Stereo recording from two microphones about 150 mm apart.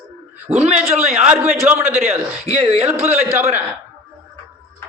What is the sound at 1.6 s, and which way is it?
Speech, 15° right (ahead or behind).